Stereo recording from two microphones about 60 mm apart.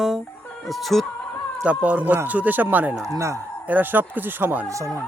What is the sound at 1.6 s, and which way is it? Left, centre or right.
Speech, right.